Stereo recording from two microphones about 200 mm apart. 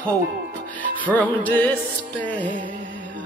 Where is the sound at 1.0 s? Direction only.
10° left (ahead or behind).